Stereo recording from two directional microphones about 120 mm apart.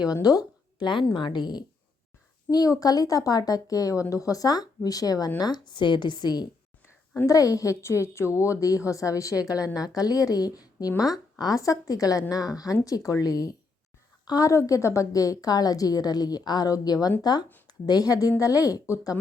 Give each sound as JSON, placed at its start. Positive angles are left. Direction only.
{"t": 0.1, "sound": "a woman's voice", "side_deg": 30}